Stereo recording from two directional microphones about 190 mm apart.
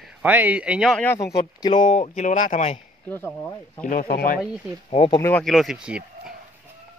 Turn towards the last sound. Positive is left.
turn(degrees=-5)  # may be behind; listen again after turning